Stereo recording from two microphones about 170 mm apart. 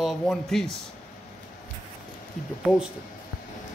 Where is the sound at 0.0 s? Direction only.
Centre (ahead or behind).